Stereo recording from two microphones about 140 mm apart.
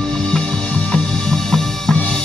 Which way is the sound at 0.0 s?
5° left (ahead or behind).